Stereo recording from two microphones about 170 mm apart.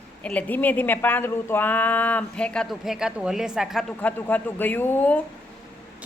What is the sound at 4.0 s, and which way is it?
Speech, 10° left (ahead or behind).